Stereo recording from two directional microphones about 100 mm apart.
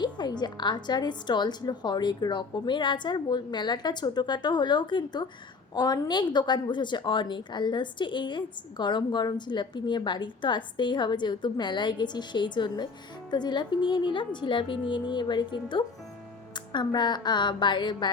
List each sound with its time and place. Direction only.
0.0 s a woman's voice: 45° left (ahead or behind)
5.7 s a woman's voice: 40° left (ahead or behind)